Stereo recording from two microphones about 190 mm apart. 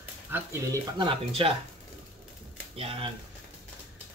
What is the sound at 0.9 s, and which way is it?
Speech, 25° right (ahead or behind).